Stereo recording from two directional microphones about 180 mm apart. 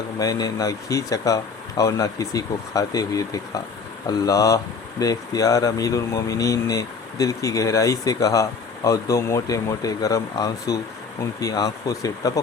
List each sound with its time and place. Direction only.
0.2 s speech: 20° left (ahead or behind)